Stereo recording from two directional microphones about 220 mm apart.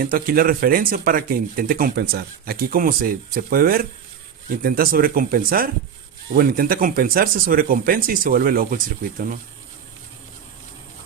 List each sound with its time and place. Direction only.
0.0 s speech: 40° right (ahead or behind)